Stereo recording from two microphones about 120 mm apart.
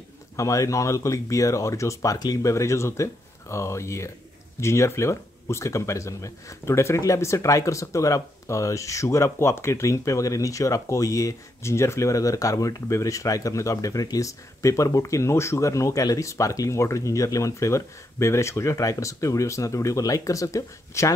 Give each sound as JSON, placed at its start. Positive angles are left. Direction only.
{"t": 0.4, "sound": "speech", "side_deg": 25}